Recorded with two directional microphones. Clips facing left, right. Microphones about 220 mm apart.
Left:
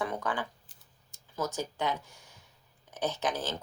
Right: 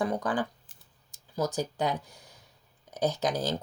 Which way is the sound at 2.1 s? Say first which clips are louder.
Right 3 dB; 35° right (ahead or behind).